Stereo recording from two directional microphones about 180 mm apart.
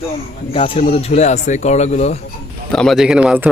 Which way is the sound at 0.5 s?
30° left (ahead or behind).